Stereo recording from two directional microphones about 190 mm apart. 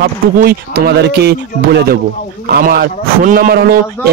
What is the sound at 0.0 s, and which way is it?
Speech, 55° right (ahead or behind).